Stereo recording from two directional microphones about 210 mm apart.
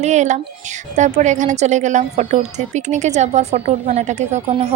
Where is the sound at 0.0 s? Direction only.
35° right (ahead or behind).